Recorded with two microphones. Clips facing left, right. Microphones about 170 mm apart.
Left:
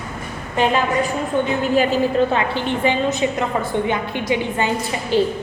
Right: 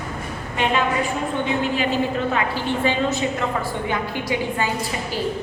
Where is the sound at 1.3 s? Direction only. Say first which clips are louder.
Left 8 dB; 40° left (ahead or behind).